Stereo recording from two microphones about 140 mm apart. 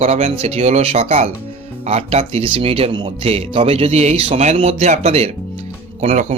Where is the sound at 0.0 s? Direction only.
50° right (ahead or behind).